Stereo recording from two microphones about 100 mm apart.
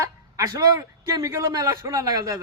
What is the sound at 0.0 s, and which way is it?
A man's voice, 30° right (ahead or behind).